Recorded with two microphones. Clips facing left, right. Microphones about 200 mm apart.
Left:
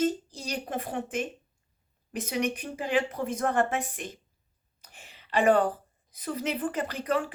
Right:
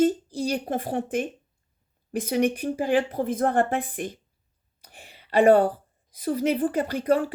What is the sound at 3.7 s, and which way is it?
Speech, 55° right (ahead or behind).